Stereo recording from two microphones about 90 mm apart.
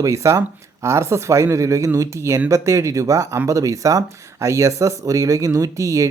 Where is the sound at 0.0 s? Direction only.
35° right (ahead or behind).